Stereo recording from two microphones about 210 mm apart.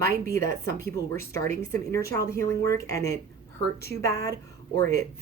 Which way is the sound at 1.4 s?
10° left (ahead or behind).